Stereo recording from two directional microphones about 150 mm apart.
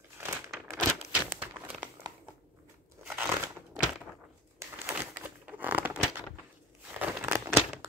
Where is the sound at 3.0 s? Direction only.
10° right (ahead or behind).